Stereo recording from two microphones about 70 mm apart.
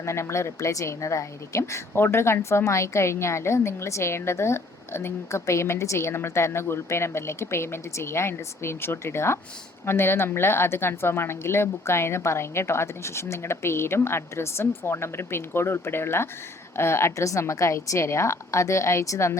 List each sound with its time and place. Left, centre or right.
0.0 s a woman's voice: left